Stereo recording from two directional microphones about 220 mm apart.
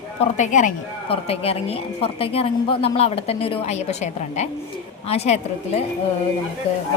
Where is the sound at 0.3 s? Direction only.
35° left (ahead or behind).